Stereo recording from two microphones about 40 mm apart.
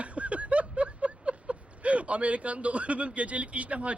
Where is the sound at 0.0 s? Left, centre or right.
Right.